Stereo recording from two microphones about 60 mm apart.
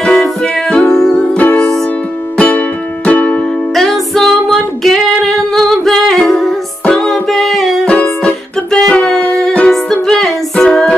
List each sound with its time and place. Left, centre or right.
0.0 s music: centre
1.4 s music: centre
3.7 s music: centre
7.8 s music: centre